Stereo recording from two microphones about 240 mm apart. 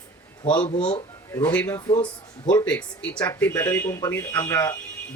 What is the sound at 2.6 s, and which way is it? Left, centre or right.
Speech, centre.